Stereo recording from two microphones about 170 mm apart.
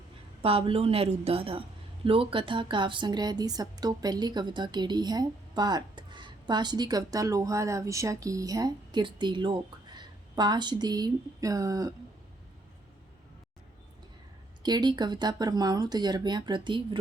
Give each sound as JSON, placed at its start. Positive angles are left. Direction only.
{"t": 0.4, "sound": "a woman's voice", "side_deg": -35}
{"t": 14.6, "sound": "a woman's voice", "side_deg": -25}